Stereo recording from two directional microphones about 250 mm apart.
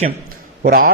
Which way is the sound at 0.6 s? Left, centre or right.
Right.